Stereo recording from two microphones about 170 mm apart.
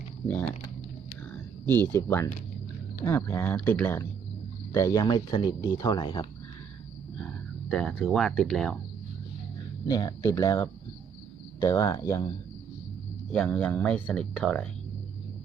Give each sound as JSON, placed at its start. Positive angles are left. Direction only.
{"t": 0.3, "sound": "speech", "side_deg": 10}
{"t": 1.9, "sound": "speech", "side_deg": 15}
{"t": 7.7, "sound": "speech", "side_deg": 5}
{"t": 9.8, "sound": "speech", "side_deg": 25}
{"t": 13.3, "sound": "speech", "side_deg": 5}